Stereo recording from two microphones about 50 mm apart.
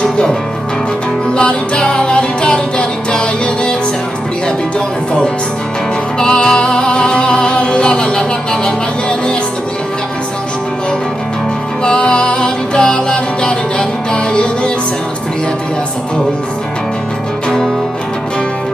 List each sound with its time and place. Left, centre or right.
0.0 s music: centre
11.8 s music: centre